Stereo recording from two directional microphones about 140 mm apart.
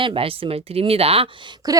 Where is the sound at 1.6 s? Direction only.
25° right (ahead or behind).